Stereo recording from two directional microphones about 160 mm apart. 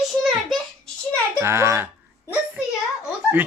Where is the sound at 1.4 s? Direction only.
15° right (ahead or behind).